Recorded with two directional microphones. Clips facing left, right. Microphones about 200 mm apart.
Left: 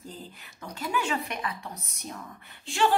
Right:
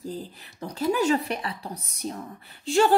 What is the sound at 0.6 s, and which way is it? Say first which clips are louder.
Speech: right 7 dB; 35° right (ahead or behind).